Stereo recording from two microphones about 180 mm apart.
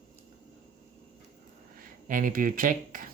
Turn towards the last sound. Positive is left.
turn(degrees=-50)  # may be behind; listen again after turning